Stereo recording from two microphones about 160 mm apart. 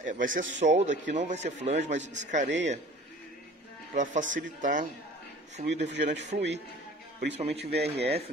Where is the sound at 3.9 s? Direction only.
50° right (ahead or behind).